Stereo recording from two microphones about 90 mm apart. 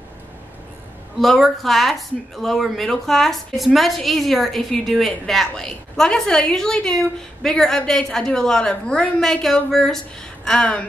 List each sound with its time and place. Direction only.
1.2 s speech: centre (ahead or behind)